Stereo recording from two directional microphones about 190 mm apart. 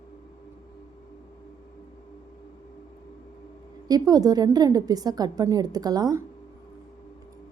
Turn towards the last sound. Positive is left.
turn(degrees=-20)  # may be behind; listen again after turning